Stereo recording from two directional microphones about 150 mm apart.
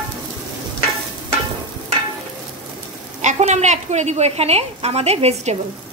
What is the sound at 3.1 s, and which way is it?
A woman's voice, 50° right (ahead or behind).